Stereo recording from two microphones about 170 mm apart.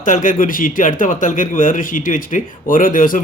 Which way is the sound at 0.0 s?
50° left (ahead or behind).